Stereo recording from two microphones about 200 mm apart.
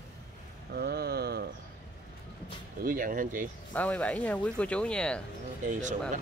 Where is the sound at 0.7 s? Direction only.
55° right (ahead or behind).